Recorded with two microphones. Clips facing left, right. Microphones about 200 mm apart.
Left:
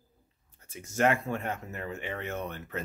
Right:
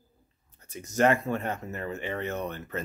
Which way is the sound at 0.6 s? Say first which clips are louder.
Right 4 dB; 40° right (ahead or behind).